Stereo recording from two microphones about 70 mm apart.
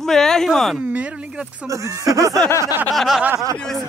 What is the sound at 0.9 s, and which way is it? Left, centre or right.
Speech, centre.